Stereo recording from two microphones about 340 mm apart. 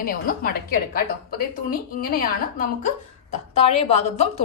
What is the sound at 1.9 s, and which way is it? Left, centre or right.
Speech, left.